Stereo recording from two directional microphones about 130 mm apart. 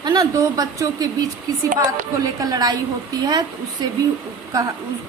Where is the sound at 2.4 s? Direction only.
30° right (ahead or behind).